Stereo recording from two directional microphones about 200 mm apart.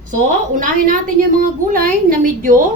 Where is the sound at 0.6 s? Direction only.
40° right (ahead or behind).